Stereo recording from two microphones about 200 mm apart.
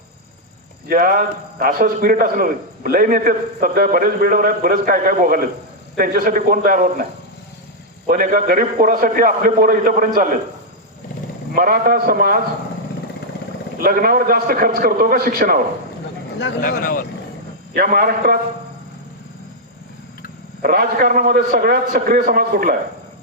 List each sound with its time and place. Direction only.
0.9 s a man's voice: 45° right (ahead or behind)
11.5 s a man's voice: 45° right (ahead or behind)
13.7 s a man's voice: 45° right (ahead or behind)
16.6 s speech: 45° left (ahead or behind)
17.7 s a man's voice: 45° right (ahead or behind)
20.6 s a man's voice: 45° right (ahead or behind)